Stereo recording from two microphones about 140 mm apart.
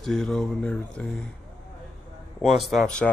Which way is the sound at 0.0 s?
5° left (ahead or behind).